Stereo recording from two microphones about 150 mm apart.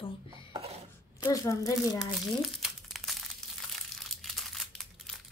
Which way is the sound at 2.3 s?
Centre (ahead or behind).